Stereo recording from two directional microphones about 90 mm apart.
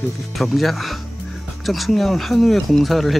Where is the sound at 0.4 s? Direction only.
Centre (ahead or behind).